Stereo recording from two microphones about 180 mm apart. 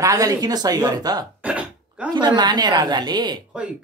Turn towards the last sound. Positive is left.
turn(degrees=-5)  # may be behind; listen again after turning